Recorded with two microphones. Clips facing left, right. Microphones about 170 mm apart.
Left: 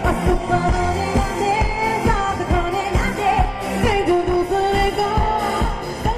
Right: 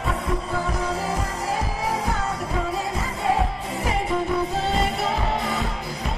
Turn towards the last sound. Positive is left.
turn(degrees=55)  # may be behind; listen again after turning